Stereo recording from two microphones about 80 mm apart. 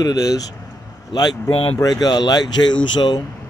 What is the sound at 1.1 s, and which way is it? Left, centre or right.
Speech, left.